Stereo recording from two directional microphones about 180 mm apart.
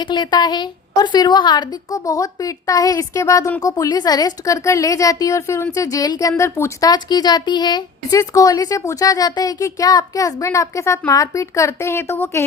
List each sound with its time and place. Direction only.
0.0 s a woman's voice: 25° left (ahead or behind)